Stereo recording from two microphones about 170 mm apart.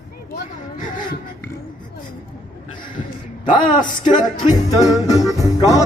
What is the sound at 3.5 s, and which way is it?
Music, 25° left (ahead or behind).